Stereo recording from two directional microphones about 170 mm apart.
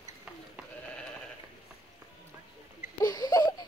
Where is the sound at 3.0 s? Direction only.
25° left (ahead or behind).